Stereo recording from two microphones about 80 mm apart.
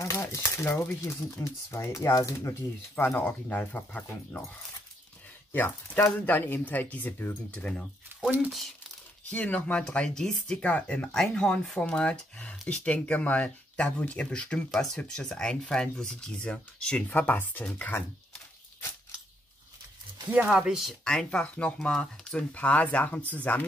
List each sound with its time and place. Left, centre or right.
0.0 s speech: left
3.2 s speech: left
5.5 s speech: left
8.1 s a sound: right
9.3 s speech: centre
20.2 s speech: centre
21.0 s speech: centre